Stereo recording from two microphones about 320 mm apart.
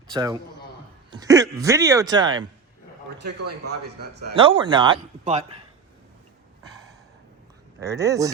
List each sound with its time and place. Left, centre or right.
0.1 s speech: centre
3.4 s a man's voice: right
4.4 s speech: centre
7.8 s speech: centre